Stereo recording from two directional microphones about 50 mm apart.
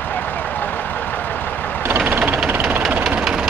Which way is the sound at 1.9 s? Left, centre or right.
Right.